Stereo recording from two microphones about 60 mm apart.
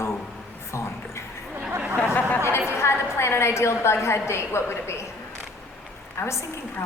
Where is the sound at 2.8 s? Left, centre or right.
Left.